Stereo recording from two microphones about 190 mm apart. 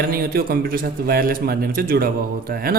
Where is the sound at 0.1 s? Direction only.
50° right (ahead or behind).